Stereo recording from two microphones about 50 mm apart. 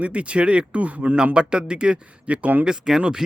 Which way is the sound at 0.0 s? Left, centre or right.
Right.